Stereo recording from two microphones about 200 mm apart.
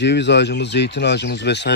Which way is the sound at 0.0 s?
60° left (ahead or behind).